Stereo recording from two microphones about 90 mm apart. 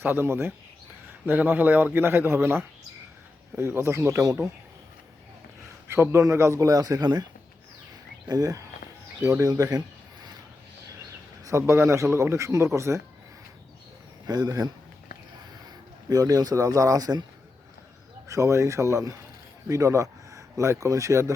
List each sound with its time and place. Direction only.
0.0 s a man's voice: 25° right (ahead or behind)
5.9 s a man's voice: 30° right (ahead or behind); by 7.3 s 50° right (ahead or behind)
8.3 s a man's voice: 40° right (ahead or behind)
11.4 s a man's voice: 35° right (ahead or behind)
14.3 s speech: 45° right (ahead or behind)
16.0 s speech: 45° right (ahead or behind)
18.3 s a man's voice: 35° right (ahead or behind)